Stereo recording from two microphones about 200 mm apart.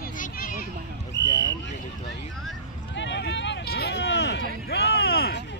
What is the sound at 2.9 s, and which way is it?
Speech, 65° left (ahead or behind).